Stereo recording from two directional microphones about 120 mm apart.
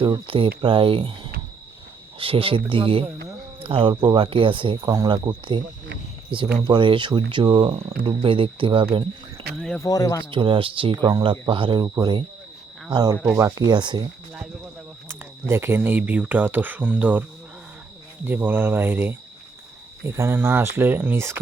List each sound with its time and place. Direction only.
0.0 s speech: 45° right (ahead or behind)
4.8 s speech: 25° right (ahead or behind)
5.0 s speech: 40° right (ahead or behind)
9.6 s cricket: 5° left (ahead or behind)
9.8 s speech: 30° left (ahead or behind)
10.3 s speech: 45° right (ahead or behind)
10.9 s speech: 35° right (ahead or behind)
11.2 s speech: 45° right (ahead or behind)
15.0 s speech: 20° right (ahead or behind)
18.3 s speech: 15° right (ahead or behind)